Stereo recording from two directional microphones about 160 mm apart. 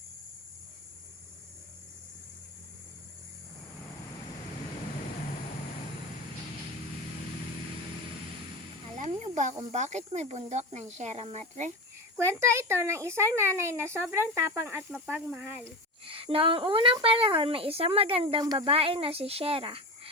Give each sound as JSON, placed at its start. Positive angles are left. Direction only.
{"t": 9.0, "sound": "snake", "side_deg": -45}
{"t": 9.7, "sound": "speech", "side_deg": -45}
{"t": 12.1, "sound": "speech", "side_deg": -15}
{"t": 16.0, "sound": "speech", "side_deg": -35}